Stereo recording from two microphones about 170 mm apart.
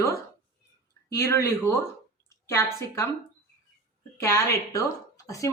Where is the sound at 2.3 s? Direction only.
15° left (ahead or behind).